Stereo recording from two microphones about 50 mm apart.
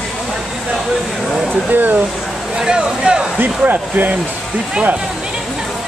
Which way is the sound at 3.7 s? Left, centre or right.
Right.